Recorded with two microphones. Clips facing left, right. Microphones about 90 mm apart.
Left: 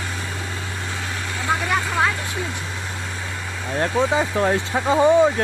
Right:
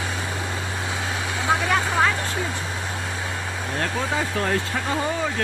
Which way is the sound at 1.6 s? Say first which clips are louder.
Left 1 dB; 5° right (ahead or behind).